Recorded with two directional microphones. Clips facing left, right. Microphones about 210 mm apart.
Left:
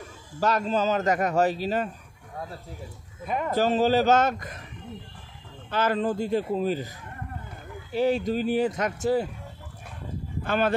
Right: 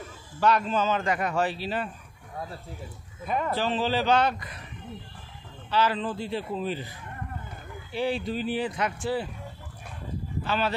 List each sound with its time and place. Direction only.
0.4 s a man's voice: 40° left (ahead or behind)
3.3 s speech: 15° left (ahead or behind)
3.5 s speech: 45° left (ahead or behind)
5.7 s speech: 50° left (ahead or behind)
7.9 s speech: 45° left (ahead or behind)
10.4 s speech: 50° left (ahead or behind)